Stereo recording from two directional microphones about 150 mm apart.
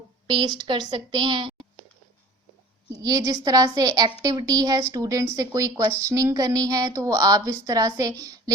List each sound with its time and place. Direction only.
0.3 s a woman's voice: 30° right (ahead or behind)
3.0 s a woman's voice: 25° right (ahead or behind)